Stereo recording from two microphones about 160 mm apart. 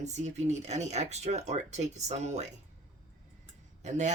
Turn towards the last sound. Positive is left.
turn(degrees=-45)  # may be behind; listen again after turning